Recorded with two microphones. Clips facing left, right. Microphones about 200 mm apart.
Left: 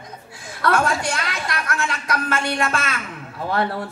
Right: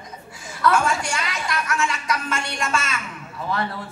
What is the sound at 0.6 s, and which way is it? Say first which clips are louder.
A woman's voice: even; 60° left (ahead or behind).